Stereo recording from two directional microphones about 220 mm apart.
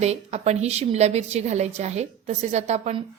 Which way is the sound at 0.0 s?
30° right (ahead or behind).